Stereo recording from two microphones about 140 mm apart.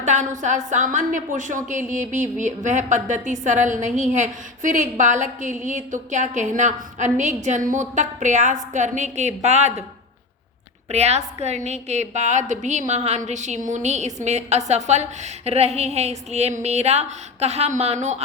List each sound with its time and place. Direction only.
0.0 s a woman's voice: 60° right (ahead or behind)
10.8 s a woman's voice: 50° right (ahead or behind)